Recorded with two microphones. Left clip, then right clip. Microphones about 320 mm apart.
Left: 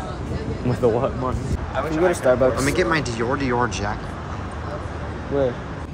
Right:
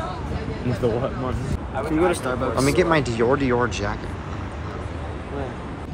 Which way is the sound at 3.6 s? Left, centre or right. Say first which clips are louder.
Left 1 dB; centre.